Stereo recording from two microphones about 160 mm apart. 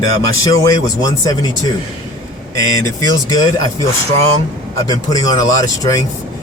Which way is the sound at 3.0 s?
25° left (ahead or behind).